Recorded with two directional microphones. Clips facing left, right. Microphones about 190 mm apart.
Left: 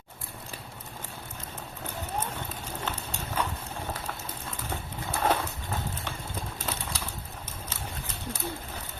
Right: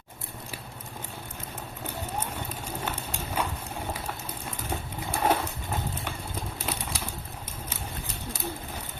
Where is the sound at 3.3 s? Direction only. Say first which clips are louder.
Right 1 dB; 10° right (ahead or behind).